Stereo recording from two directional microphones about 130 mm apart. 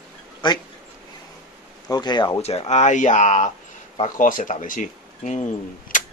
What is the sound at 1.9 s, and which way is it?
Speech, 35° left (ahead or behind).